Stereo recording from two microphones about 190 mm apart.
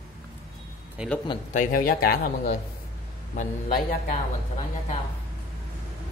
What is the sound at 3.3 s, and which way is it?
Speech, 35° left (ahead or behind).